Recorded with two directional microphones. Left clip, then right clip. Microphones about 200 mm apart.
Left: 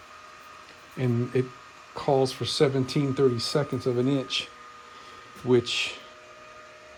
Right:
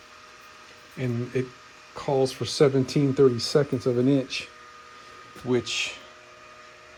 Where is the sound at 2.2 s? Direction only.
10° left (ahead or behind).